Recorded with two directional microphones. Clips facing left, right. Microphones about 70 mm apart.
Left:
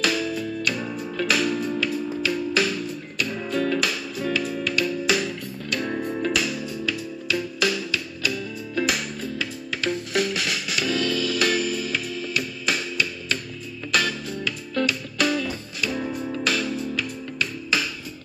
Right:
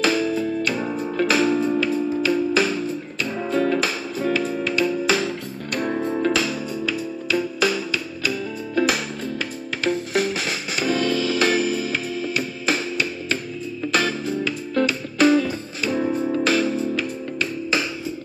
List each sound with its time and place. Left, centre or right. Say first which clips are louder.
0.0 s music: right 4 dB; right
5.9 s music: right 4 dB; right
9.4 s music: right 3 dB; right